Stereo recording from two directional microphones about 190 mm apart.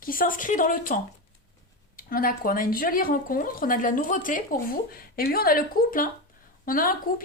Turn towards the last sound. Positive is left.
turn(degrees=45)  # may be behind; listen again after turning